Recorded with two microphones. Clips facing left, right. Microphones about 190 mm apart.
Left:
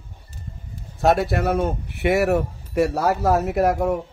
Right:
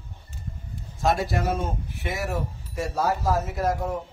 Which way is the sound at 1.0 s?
65° left (ahead or behind).